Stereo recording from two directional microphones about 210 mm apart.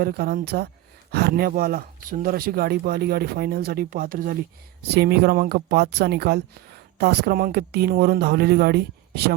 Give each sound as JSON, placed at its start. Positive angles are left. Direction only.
{"t": 0.0, "sound": "speech", "side_deg": -45}